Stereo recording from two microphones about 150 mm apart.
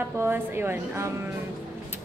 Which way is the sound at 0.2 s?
15° right (ahead or behind).